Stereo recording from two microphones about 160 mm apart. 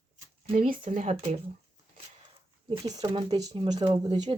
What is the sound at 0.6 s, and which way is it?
Speech, 60° right (ahead or behind).